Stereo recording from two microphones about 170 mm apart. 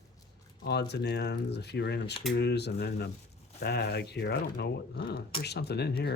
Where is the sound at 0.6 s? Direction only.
80° left.